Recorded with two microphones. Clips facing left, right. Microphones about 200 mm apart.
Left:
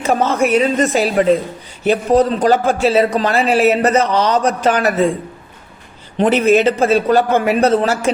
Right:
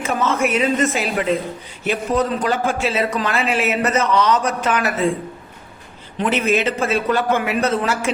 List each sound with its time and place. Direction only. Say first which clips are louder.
0.0 s speech: left 4 dB; 35° left (ahead or behind)
6.1 s speech: left 7 dB; 35° left (ahead or behind)